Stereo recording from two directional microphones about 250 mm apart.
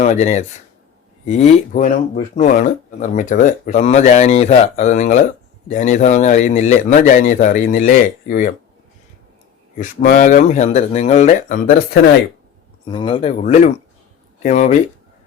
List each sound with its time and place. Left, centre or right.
0.0 s speech: left
9.7 s speech: left
12.8 s speech: centre